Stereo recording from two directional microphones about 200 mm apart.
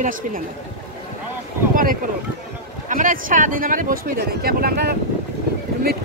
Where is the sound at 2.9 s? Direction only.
40° right (ahead or behind).